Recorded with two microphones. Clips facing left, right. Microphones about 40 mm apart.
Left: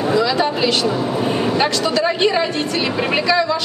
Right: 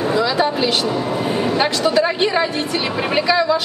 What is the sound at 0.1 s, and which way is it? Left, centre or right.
Speech, centre.